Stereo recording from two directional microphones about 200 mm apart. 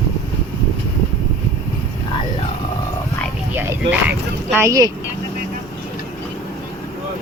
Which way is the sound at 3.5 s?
10° right (ahead or behind).